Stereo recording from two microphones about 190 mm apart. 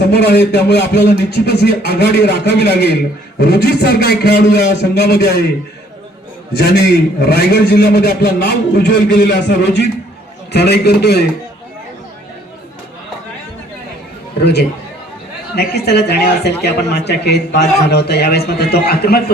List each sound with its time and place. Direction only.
0.0 s a man's voice: 60° left (ahead or behind)
6.6 s a man's voice: 60° left (ahead or behind)
15.5 s a man's voice: 60° left (ahead or behind)